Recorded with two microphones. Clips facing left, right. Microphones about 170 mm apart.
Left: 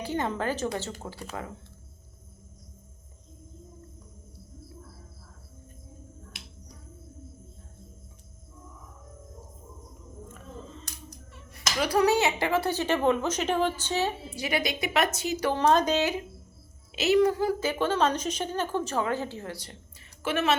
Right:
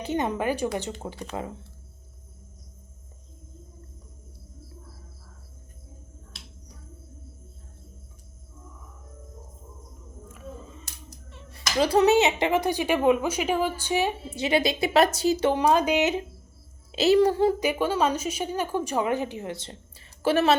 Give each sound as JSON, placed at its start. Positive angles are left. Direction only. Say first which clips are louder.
{"t": 0.0, "sound": "a woman's voice", "louder": "right 3 dB", "side_deg": -20}
{"t": 10.3, "sound": "a sound", "louder": "right 4 dB", "side_deg": -10}
{"t": 11.3, "sound": "a sound", "louder": "right 2 dB", "side_deg": -25}
{"t": 11.8, "sound": "a woman's voice", "louder": "right 4 dB", "side_deg": -25}
{"t": 15.4, "sound": "a woman's voice", "louder": "even", "side_deg": -10}
{"t": 16.9, "sound": "a woman's voice", "louder": "right 3 dB", "side_deg": -30}
{"t": 20.2, "sound": "a woman's voice", "louder": "right 5 dB", "side_deg": -35}